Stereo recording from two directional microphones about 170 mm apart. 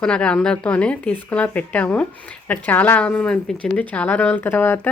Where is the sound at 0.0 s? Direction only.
5° left (ahead or behind).